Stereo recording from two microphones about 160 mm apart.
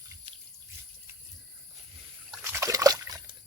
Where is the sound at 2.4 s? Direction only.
15° right (ahead or behind).